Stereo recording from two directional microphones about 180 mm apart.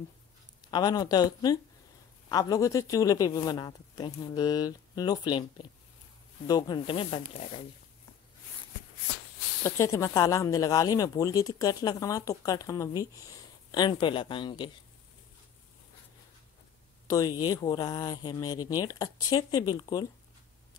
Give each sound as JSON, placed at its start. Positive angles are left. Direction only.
{"t": 0.7, "sound": "speech", "side_deg": 25}
{"t": 9.6, "sound": "speech", "side_deg": 15}
{"t": 17.1, "sound": "speech", "side_deg": 20}